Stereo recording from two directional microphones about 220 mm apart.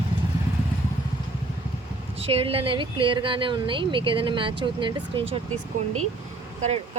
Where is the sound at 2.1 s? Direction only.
25° right (ahead or behind).